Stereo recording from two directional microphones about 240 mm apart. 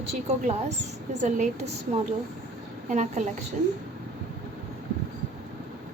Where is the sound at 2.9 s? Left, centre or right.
Right.